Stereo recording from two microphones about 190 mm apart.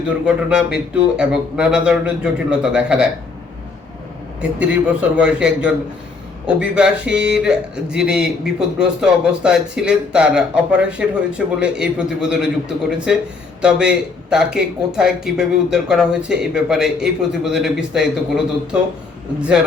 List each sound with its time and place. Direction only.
0.3 s a man's voice: 5° right (ahead or behind)
4.4 s a man's voice: 5° right (ahead or behind)